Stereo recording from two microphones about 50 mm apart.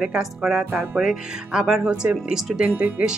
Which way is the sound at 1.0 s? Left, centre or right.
Centre.